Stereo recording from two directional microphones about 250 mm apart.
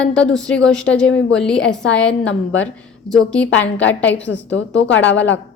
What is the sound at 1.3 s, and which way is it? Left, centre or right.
A woman's voice, centre.